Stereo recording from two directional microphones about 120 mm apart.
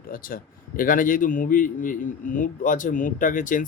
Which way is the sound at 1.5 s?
90° left.